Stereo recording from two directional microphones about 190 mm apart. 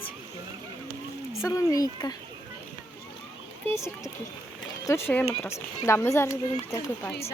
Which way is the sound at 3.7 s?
15° left (ahead or behind).